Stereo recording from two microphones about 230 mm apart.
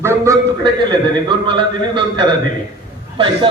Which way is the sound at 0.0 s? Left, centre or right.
Centre.